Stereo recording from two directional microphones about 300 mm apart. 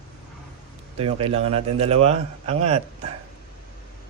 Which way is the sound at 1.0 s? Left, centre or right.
Centre.